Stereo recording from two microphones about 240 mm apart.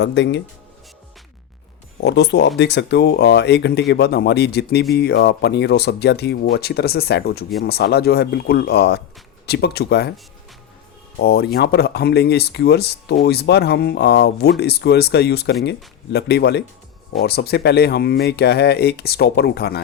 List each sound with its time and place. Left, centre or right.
0.0 s speech: left
2.0 s speech: left
11.2 s speech: left